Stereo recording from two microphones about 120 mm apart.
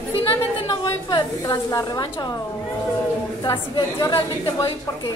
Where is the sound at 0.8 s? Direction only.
35° left (ahead or behind).